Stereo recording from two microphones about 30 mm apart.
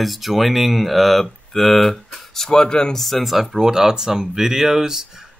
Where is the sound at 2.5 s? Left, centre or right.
Left.